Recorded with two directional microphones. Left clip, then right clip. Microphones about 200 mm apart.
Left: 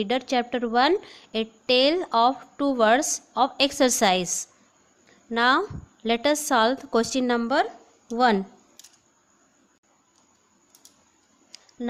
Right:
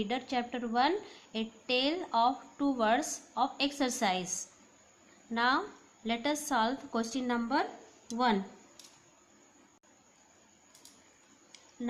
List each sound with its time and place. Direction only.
0.0 s a woman's voice: 45° left (ahead or behind)